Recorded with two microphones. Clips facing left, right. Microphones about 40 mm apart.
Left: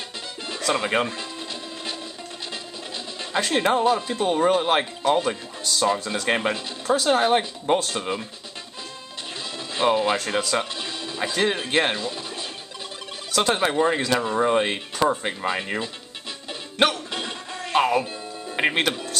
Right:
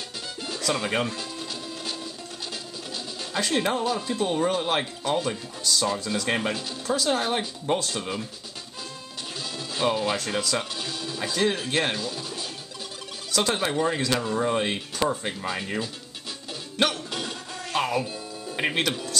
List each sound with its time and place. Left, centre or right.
0.5 s speech: centre
3.3 s speech: centre
9.8 s speech: left
16.9 s music: left